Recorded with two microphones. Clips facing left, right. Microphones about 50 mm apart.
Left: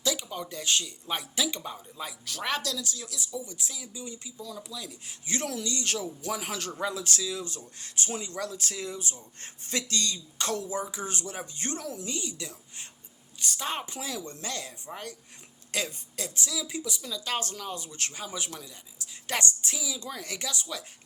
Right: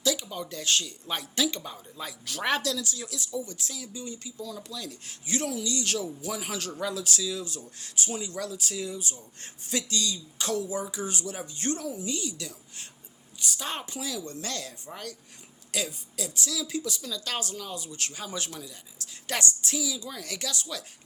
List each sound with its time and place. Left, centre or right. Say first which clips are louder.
0.0 s speech: right 2 dB; left
2.2 s speech: right 4 dB; centre; by 4.6 s left
4.7 s speech: right 2 dB; centre
5.6 s speech: right 2 dB; left
11.8 s a woman's voice: right 2 dB; left
12.0 s speech: right 2 dB; left
13.8 s speech: right 1 dB; left
14.3 s speech: right 1 dB; left
15.7 s speech: even; left
16.5 s speech: right 2 dB; left
17.4 s speech: even; left
19.3 s speech: right 1 dB; left
20.0 s speech: left 1 dB; left
20.2 s speech: even; left